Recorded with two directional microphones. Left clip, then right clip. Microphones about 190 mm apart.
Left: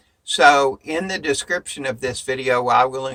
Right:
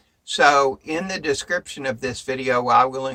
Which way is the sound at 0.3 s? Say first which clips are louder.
Left 2 dB; 30° left (ahead or behind).